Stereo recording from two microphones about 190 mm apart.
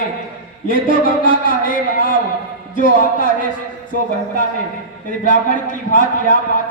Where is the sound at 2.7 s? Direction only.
45° left (ahead or behind).